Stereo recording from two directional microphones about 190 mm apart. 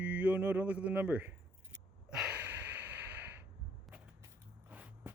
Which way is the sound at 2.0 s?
5° right (ahead or behind).